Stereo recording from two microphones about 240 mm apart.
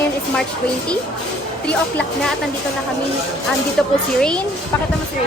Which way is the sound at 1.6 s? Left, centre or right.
Centre.